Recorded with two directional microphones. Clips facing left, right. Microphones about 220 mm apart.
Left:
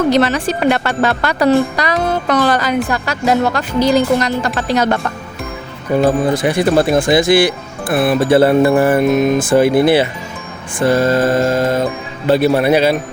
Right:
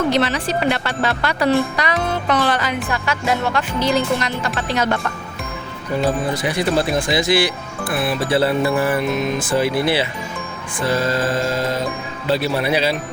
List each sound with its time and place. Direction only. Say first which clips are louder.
0.1 s speech: left 5 dB; 45° left (ahead or behind)
6.3 s speech: left 6 dB; 50° left (ahead or behind)